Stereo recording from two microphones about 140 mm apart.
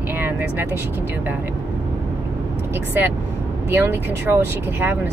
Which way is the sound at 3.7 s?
15° right (ahead or behind).